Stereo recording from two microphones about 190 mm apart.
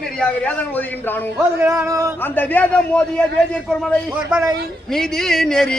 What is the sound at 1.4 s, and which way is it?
Speech, 15° right (ahead or behind).